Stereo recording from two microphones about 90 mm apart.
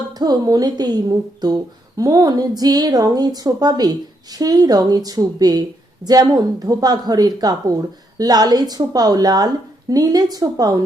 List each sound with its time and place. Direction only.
0.1 s speech: 50° right (ahead or behind)